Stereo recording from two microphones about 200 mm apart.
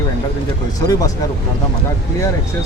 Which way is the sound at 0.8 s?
15° left (ahead or behind).